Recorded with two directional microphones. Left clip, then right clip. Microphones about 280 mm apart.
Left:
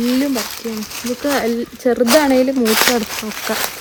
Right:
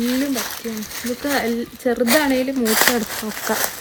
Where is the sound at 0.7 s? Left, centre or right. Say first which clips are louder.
Left 3 dB; centre.